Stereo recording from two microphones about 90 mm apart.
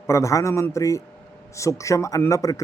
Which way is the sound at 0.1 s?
35° left (ahead or behind).